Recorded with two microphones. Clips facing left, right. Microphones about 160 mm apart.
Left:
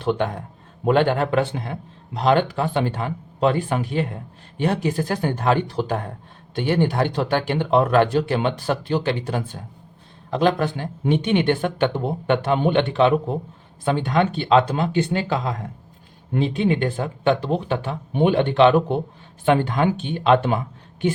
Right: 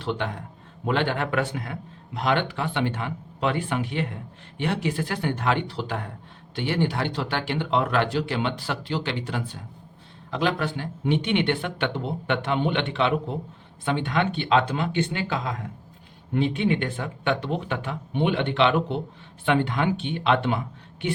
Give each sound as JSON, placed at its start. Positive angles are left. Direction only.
{"t": 0.0, "sound": "a man's voice", "side_deg": 55}
{"t": 1.3, "sound": "speech", "side_deg": 30}